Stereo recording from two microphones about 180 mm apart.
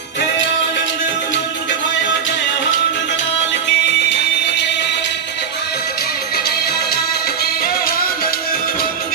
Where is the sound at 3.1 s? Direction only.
85° left.